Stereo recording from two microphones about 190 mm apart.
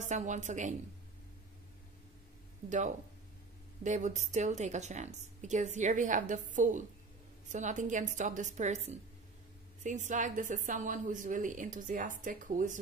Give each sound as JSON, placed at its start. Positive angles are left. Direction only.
{"t": 0.0, "sound": "a woman's voice", "side_deg": -40}
{"t": 2.7, "sound": "a woman's voice", "side_deg": -40}